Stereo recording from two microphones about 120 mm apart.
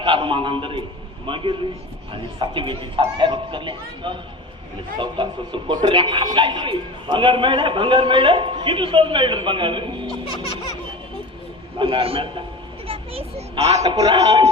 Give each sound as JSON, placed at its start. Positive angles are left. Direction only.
{"t": 0.0, "sound": "speech", "side_deg": -45}
{"t": 11.8, "sound": "a child's voice", "side_deg": -50}
{"t": 13.8, "sound": "speech", "side_deg": -35}